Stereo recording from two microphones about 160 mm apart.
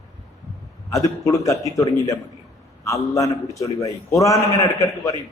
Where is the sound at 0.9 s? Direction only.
20° left (ahead or behind).